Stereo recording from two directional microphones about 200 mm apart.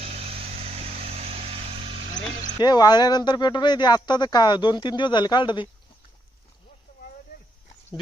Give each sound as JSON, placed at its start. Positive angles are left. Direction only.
{"t": 0.6, "sound": "vehicle", "side_deg": -30}
{"t": 2.6, "sound": "speech", "side_deg": 20}